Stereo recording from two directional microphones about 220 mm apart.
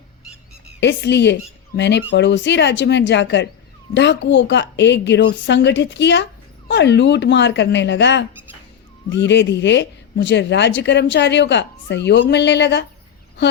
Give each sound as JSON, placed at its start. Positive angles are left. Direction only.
{"t": 0.8, "sound": "speech", "side_deg": 50}